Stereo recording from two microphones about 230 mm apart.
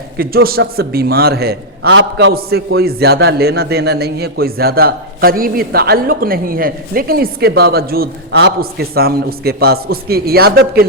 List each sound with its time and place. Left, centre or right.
0.2 s a man's voice: right